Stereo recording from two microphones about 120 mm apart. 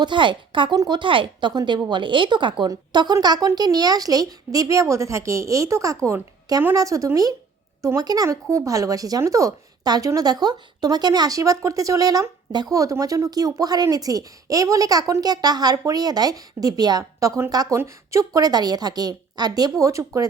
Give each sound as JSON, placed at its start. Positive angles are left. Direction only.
{"t": 0.0, "sound": "a woman's voice", "side_deg": -40}